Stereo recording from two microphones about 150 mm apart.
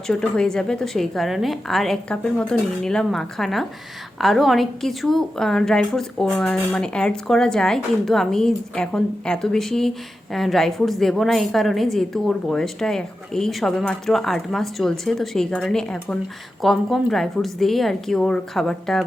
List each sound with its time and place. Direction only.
0.1 s a woman's voice: 5° left (ahead or behind)